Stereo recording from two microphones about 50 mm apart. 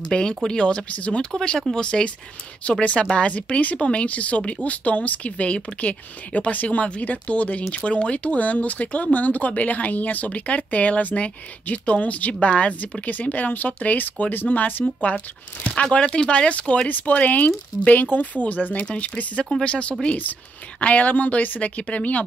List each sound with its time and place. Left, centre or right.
0.1 s speech: centre; by 15.1 s left
15.7 s speech: left